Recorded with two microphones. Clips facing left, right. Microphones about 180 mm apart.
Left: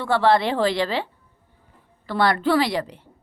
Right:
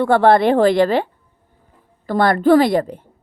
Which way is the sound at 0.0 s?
55° right (ahead or behind).